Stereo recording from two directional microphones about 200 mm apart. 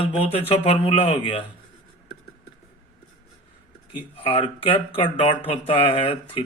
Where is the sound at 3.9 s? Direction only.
25° left (ahead or behind).